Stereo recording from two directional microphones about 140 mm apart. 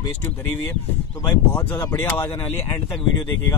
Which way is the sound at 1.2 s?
20° left (ahead or behind).